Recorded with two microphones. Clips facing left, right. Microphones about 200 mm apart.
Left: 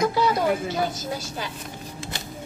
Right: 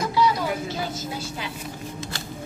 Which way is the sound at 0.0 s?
50° left (ahead or behind).